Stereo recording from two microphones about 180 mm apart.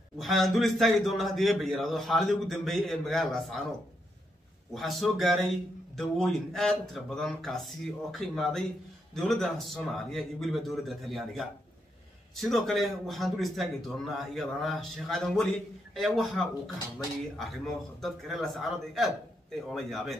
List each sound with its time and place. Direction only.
0.2 s a man's voice: centre (ahead or behind)
4.7 s a man's voice: centre (ahead or behind)